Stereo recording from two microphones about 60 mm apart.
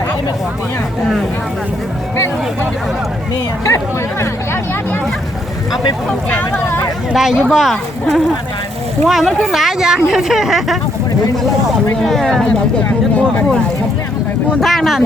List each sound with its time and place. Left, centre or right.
3.7 s speech: left
7.1 s speech: centre
11.9 s speech: centre
14.6 s speech: centre